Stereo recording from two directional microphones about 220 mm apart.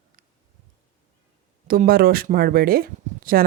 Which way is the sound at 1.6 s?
40° right (ahead or behind).